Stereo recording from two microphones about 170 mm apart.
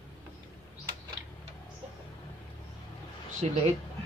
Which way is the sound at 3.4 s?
35° right (ahead or behind).